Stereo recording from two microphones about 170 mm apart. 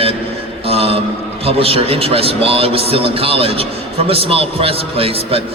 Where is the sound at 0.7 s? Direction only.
35° right (ahead or behind).